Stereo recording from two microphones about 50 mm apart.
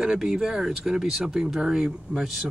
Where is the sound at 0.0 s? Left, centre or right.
Centre.